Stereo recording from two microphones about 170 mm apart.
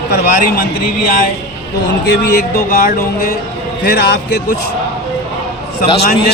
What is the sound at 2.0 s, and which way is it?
Music, 65° left (ahead or behind).